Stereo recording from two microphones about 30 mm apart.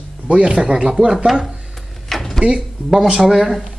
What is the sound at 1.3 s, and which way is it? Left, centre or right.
Speech, centre.